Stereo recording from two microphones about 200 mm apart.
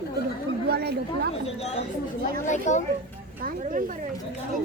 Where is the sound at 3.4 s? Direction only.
45° right (ahead or behind).